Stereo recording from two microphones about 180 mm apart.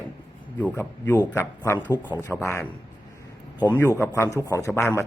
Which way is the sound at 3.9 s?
15° left (ahead or behind).